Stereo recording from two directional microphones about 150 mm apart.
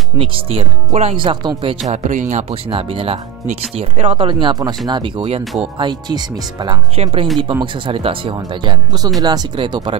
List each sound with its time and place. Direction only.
0.2 s speech: 40° right (ahead or behind)
1.9 s speech: 55° right (ahead or behind)
2.5 s speech: 40° right (ahead or behind)
7.0 s speech: 40° right (ahead or behind)